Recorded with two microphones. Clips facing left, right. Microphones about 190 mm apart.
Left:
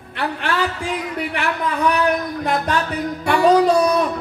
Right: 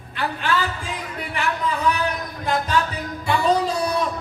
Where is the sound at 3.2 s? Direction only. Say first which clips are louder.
Left 6 dB; 65° left (ahead or behind).